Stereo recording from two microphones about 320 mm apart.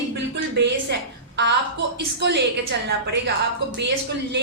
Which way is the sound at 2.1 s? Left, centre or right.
Right.